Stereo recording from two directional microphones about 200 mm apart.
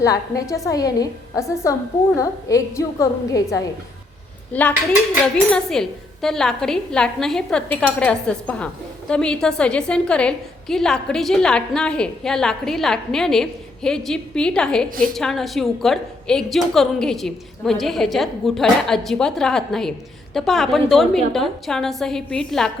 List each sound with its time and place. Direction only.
0.0 s a woman's voice: 15° left (ahead or behind)
4.5 s a woman's voice: 5° left (ahead or behind)